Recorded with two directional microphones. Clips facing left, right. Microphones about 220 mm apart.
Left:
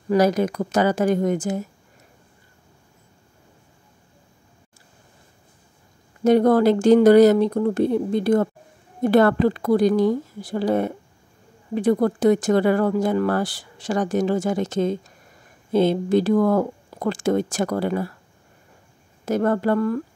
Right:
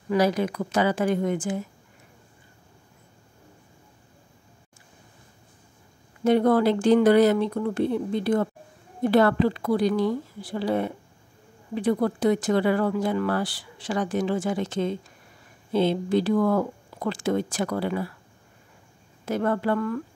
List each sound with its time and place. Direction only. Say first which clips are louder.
0.1 s speech: left 4 dB; 45° left (ahead or behind)
6.2 s speech: left 4 dB; 40° left (ahead or behind)
19.2 s speech: left 4 dB; 40° left (ahead or behind)